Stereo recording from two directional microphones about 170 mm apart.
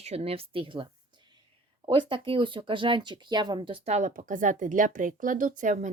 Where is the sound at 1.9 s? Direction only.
30° right (ahead or behind).